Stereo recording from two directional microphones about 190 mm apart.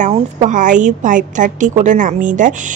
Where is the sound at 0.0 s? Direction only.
35° right (ahead or behind).